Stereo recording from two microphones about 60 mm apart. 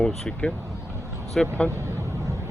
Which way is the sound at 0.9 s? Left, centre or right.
Right.